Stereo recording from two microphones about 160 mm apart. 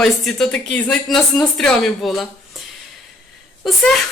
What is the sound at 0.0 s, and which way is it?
Speech, 5° left (ahead or behind).